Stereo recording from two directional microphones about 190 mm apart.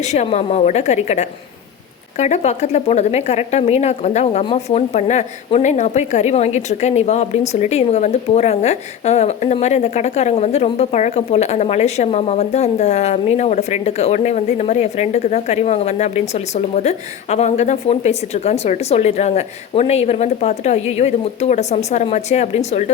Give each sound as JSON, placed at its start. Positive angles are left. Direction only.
{"t": 0.0, "sound": "speech", "side_deg": 35}